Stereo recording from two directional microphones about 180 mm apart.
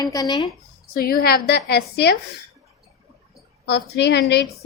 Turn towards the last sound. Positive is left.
turn(degrees=70)  # may be behind; listen again after turning